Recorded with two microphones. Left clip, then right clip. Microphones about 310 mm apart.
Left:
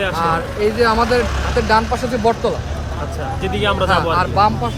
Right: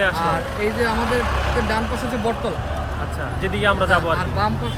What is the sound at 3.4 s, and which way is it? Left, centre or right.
Speech, centre.